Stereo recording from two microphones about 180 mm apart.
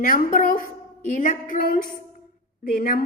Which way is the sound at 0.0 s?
50° left (ahead or behind).